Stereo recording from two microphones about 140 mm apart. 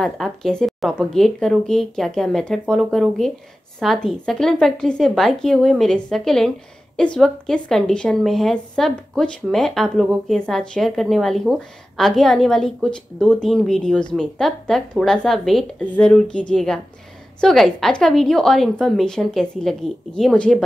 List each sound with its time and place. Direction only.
0.0 s a woman's voice: 5° left (ahead or behind)